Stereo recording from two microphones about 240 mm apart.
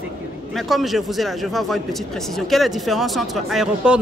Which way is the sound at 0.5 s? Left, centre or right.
Centre.